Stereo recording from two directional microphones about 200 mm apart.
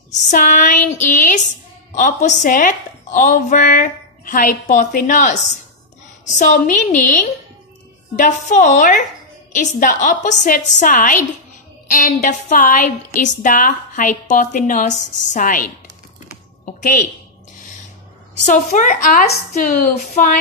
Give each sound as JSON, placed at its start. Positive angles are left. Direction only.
{"t": 0.1, "sound": "a woman's voice", "side_deg": 40}
{"t": 16.6, "sound": "a sound", "side_deg": 40}
{"t": 18.4, "sound": "a woman's voice", "side_deg": 40}